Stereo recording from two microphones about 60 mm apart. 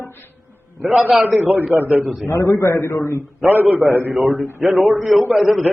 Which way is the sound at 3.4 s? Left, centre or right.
Centre.